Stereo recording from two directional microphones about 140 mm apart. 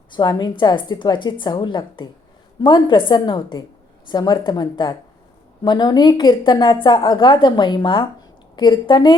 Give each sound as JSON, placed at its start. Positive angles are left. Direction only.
{"t": 0.1, "sound": "a woman's voice", "side_deg": 30}